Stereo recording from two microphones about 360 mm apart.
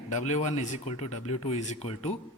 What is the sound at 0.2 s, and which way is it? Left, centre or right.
A man's voice, centre.